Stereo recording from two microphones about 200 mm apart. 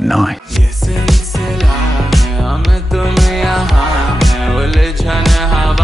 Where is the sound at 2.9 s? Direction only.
Centre (ahead or behind).